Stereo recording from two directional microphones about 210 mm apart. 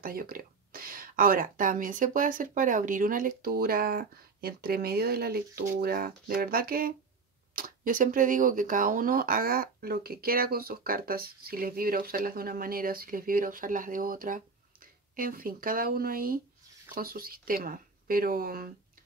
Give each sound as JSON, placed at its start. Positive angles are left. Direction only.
{"t": 0.0, "sound": "speech", "side_deg": -45}